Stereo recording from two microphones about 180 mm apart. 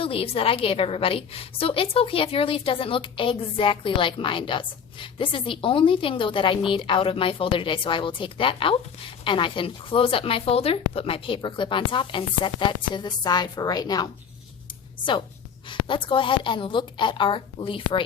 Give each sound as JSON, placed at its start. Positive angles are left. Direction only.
{"t": 0.0, "sound": "speech", "side_deg": 30}
{"t": 15.7, "sound": "speech", "side_deg": 25}